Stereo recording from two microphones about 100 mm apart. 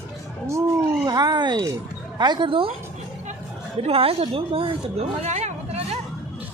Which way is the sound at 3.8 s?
75° right (ahead or behind).